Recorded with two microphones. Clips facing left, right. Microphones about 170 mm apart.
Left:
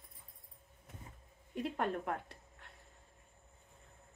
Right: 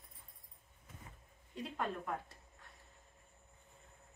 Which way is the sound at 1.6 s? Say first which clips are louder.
Left 4 dB; 60° left (ahead or behind).